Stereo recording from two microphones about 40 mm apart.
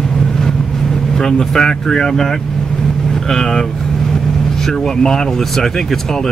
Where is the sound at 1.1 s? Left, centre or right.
Centre.